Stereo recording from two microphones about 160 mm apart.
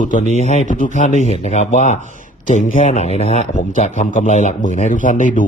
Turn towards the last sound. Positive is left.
turn(degrees=50)  # may be behind; listen again after turning